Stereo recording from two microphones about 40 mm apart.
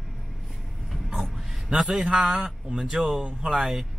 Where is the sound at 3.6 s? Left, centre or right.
Centre.